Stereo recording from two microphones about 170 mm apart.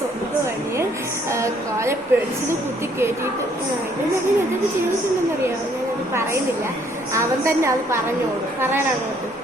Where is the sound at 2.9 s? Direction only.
15° right (ahead or behind).